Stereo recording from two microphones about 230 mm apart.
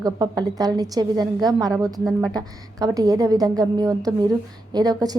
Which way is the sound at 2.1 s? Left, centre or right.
Centre.